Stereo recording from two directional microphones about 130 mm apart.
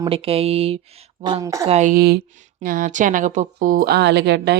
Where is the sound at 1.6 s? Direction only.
55° right (ahead or behind).